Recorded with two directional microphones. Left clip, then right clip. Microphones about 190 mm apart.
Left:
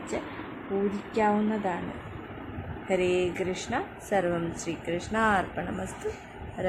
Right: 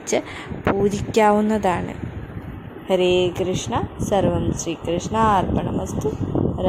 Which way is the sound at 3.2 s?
20° right (ahead or behind).